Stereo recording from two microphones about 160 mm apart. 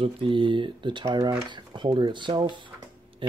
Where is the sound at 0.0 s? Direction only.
35° right (ahead or behind).